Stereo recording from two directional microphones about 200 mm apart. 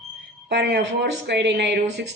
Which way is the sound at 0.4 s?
55° right (ahead or behind).